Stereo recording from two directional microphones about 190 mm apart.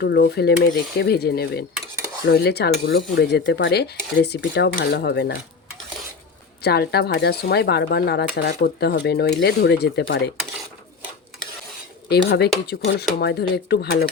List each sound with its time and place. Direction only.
0.0 s speech: 60° left (ahead or behind)
6.7 s speech: 60° left (ahead or behind)
12.0 s speech: 65° left (ahead or behind)